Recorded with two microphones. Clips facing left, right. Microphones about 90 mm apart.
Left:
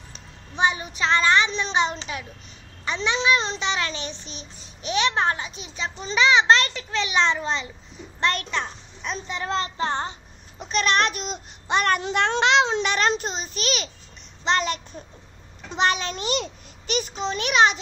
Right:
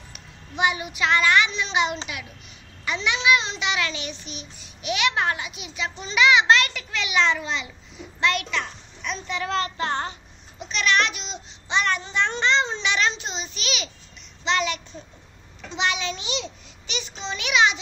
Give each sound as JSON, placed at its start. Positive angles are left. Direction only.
{"t": 0.1, "sound": "a child's voice", "side_deg": 30}
{"t": 10.6, "sound": "a child's voice", "side_deg": 40}
{"t": 12.0, "sound": "speech", "side_deg": 65}
{"t": 12.8, "sound": "a child's voice", "side_deg": 45}